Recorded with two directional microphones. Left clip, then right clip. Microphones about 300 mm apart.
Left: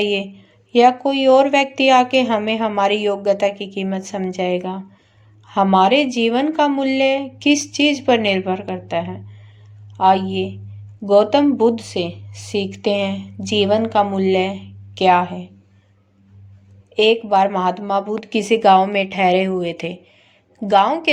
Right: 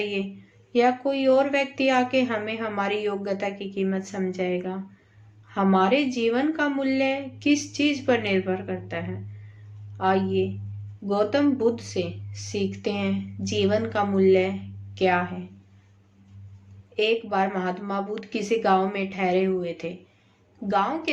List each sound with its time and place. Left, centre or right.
0.0 s a woman's voice: left
16.9 s a woman's voice: left